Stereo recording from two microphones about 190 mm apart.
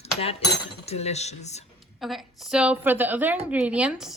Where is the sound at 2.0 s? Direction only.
Centre (ahead or behind).